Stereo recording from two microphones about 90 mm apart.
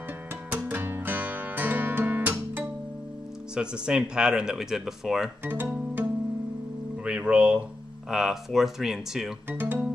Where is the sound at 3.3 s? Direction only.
10° right (ahead or behind).